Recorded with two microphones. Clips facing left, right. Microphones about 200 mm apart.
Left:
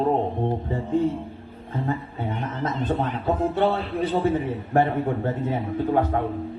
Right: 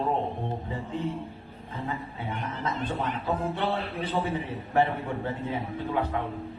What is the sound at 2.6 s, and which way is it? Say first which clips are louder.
A man's voice: left 5 dB; 45° left (ahead or behind).